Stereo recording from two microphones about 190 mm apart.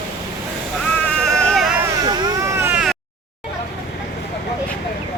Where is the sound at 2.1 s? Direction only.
20° right (ahead or behind).